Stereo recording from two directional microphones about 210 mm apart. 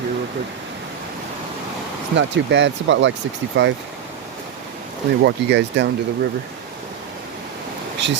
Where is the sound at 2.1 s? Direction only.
60° right (ahead or behind).